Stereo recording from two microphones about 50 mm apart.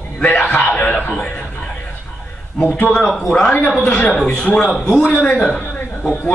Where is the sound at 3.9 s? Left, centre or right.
Left.